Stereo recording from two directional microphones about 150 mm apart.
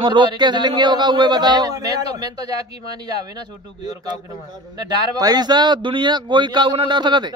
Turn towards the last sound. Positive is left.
turn(degrees=-30)  # may be behind; listen again after turning